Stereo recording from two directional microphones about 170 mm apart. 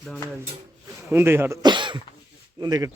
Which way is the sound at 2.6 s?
20° right (ahead or behind).